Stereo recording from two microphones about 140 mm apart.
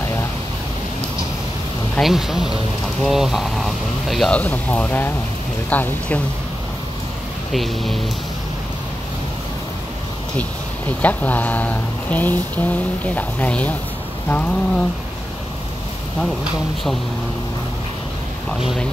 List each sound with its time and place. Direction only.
0.0 s a sound: 20° left (ahead or behind)
2.0 s speech: centre (ahead or behind)
7.5 s speech: centre (ahead or behind)
11.0 s speech: 10° left (ahead or behind)